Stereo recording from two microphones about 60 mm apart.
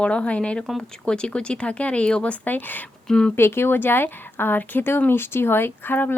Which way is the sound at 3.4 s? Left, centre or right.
Left.